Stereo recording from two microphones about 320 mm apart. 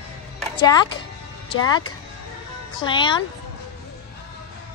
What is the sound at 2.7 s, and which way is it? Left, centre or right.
Speech, centre.